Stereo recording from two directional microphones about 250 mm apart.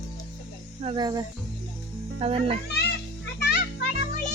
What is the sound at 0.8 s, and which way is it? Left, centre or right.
A woman's voice, centre.